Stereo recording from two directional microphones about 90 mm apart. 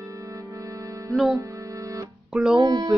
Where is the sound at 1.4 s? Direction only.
35° right (ahead or behind).